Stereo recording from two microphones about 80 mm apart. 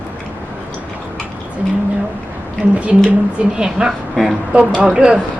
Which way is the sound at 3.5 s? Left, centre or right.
Centre.